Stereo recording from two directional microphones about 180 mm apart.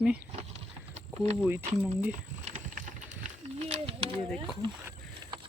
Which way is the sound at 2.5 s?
45° right (ahead or behind).